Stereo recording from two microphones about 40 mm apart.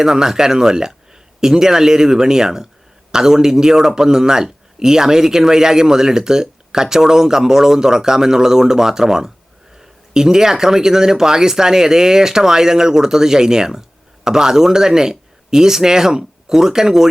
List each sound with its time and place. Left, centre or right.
0.0 s speech: centre